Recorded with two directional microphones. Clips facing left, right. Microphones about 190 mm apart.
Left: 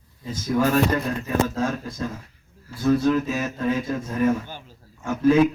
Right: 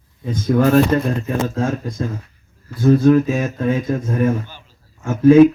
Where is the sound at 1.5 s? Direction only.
30° right (ahead or behind).